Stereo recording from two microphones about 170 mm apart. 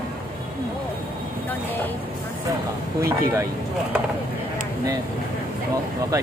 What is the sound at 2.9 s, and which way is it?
Speech, 15° right (ahead or behind).